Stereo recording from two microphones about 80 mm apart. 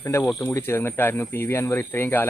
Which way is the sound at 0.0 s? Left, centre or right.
Left.